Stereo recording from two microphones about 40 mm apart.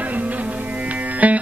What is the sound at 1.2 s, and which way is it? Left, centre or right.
Music, right.